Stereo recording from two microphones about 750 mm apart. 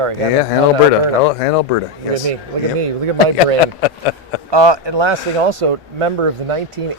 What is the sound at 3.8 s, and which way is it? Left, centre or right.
Speech, left.